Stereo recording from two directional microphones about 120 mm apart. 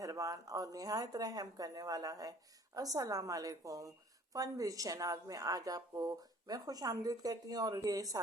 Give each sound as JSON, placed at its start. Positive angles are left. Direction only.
{"t": 0.0, "sound": "a woman's voice", "side_deg": -30}